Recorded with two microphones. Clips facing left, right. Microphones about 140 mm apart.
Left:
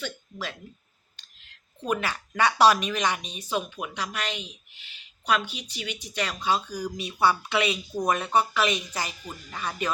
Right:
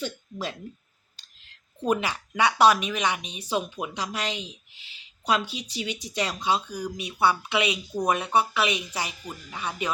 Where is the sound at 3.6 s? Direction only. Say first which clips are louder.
Right 1 dB; 25° right (ahead or behind).